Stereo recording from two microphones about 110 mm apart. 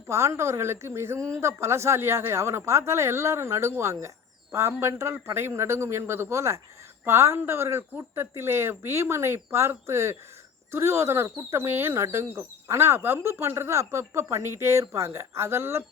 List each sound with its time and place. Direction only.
0.1 s speech: 25° right (ahead or behind)